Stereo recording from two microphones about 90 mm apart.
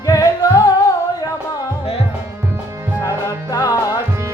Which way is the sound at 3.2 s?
45° left (ahead or behind).